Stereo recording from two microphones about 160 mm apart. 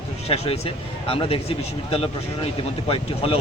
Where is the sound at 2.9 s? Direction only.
35° left (ahead or behind).